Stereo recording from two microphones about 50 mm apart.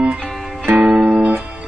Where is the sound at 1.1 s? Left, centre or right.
Right.